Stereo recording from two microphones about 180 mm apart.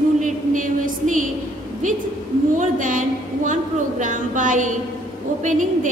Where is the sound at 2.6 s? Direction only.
45° right (ahead or behind).